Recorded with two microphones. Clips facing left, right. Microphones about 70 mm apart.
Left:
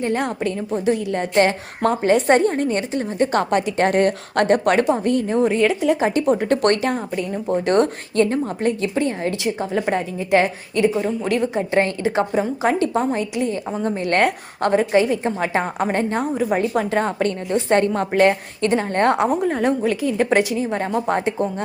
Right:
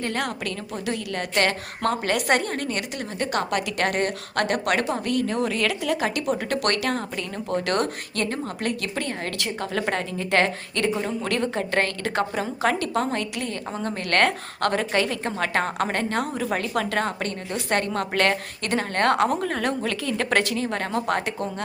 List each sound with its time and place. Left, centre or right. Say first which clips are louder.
0.0 s a woman's voice: left 6 dB; left
6.9 s a woman's voice: left 5 dB; centre
7.6 s a woman's voice: left 9 dB; left